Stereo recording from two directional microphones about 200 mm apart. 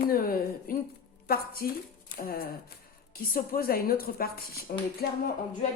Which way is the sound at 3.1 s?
50° left (ahead or behind).